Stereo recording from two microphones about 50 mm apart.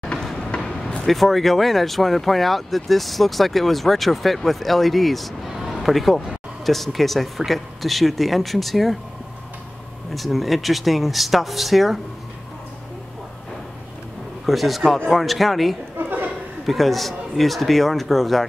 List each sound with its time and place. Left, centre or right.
0.2 s a sound: centre
0.5 s speech: centre
10.1 s speech: centre
14.4 s speech: centre
16.0 s a sound: right
16.6 s speech: centre